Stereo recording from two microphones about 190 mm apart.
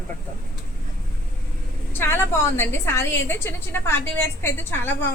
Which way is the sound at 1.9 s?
10° left (ahead or behind).